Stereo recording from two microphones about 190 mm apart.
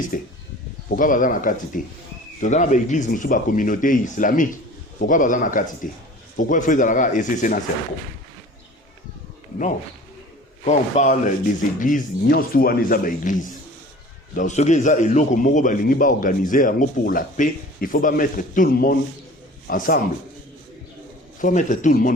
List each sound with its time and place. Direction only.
0.1 s a man's voice: 45° left (ahead or behind)
10.7 s a man's voice: 40° left (ahead or behind)
21.4 s speech: 40° left (ahead or behind)